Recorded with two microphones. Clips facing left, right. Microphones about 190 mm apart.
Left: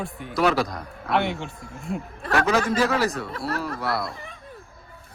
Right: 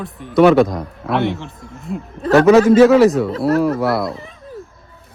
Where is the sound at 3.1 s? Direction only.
Centre (ahead or behind).